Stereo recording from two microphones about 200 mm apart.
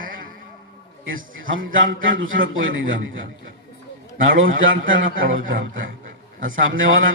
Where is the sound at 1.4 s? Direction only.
80° right.